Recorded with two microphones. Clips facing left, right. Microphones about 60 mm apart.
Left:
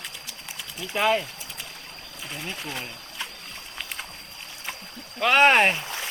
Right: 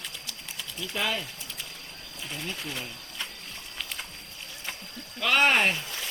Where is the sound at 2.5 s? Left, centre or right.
Centre.